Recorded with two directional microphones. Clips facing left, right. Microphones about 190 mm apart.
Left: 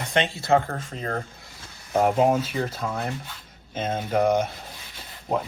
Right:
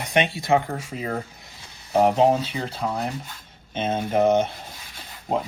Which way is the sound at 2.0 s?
30° right (ahead or behind).